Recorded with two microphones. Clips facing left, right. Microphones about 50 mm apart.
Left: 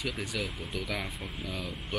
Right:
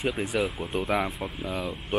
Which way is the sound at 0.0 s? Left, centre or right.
Right.